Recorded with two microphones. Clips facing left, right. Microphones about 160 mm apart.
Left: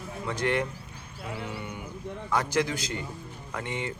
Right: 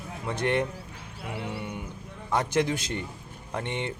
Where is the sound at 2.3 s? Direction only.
25° right (ahead or behind).